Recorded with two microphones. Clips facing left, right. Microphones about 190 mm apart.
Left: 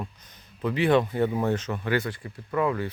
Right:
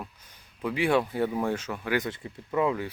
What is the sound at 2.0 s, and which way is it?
Speech, 20° right (ahead or behind).